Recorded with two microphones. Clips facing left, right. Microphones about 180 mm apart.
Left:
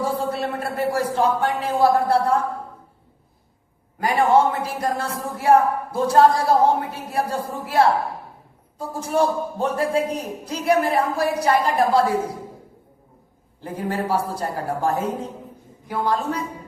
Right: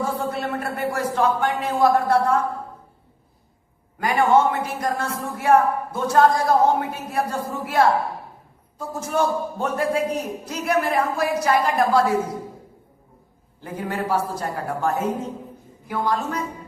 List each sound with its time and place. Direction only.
0.2 s a man's voice: 30° left (ahead or behind)
4.0 s speech: 30° left (ahead or behind)
13.6 s speech: 30° left (ahead or behind)